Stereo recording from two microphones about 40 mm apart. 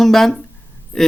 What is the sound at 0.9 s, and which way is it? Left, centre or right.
Speech, left.